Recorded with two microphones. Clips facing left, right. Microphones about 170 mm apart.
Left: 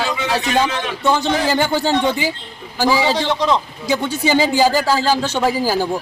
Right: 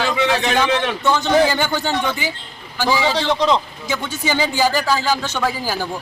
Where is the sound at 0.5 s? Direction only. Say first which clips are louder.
Right 1 dB; 30° left (ahead or behind).